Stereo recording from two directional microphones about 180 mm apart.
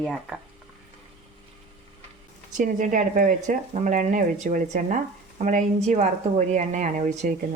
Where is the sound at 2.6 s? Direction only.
45° right (ahead or behind).